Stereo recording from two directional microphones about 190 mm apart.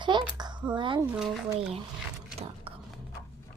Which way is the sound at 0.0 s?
25° right (ahead or behind).